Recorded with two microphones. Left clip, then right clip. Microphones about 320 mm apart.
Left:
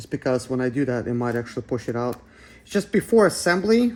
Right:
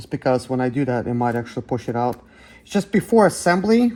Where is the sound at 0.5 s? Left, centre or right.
Centre.